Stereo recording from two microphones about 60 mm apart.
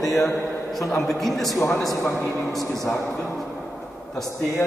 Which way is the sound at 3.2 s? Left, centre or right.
Centre.